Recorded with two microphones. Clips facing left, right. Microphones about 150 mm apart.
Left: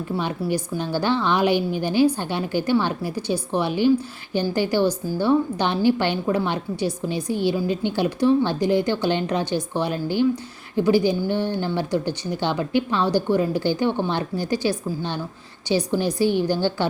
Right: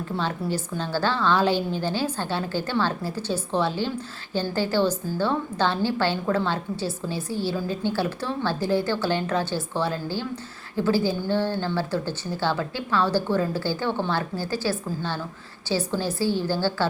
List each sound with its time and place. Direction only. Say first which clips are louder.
0.5 s a woman's voice: left 3 dB; 15° left (ahead or behind)